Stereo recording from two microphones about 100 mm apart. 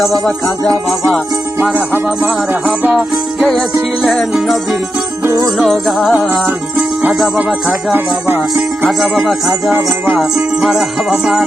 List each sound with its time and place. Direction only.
0.3 s music: 5° left (ahead or behind)
1.6 s music: 15° right (ahead or behind)
2.8 s music: 5° right (ahead or behind)
7.9 s music: 20° right (ahead or behind)
8.9 s music: centre (ahead or behind)